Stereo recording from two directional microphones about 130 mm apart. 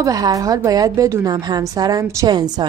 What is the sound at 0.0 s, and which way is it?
Speech, 25° right (ahead or behind).